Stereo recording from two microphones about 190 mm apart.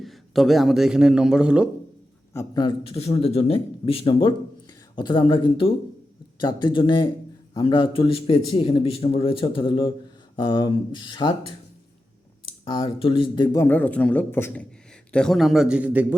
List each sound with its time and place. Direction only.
0.0 s a man's voice: centre (ahead or behind)
2.3 s a man's voice: 15° left (ahead or behind)
12.6 s a man's voice: 25° left (ahead or behind)
13.7 s a man's voice: 10° left (ahead or behind); by 16.1 s 10° right (ahead or behind)